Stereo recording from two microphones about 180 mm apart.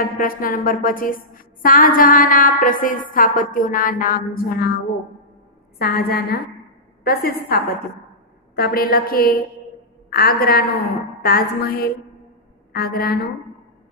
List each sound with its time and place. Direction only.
0.0 s a woman's voice: 50° left (ahead or behind)
8.5 s a woman's voice: 55° left (ahead or behind)